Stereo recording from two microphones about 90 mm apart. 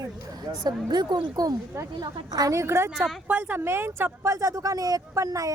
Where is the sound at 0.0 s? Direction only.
45° right (ahead or behind).